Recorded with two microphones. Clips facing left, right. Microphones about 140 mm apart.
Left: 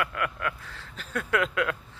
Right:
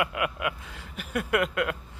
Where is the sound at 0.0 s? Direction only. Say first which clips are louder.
Right 2 dB; 15° right (ahead or behind).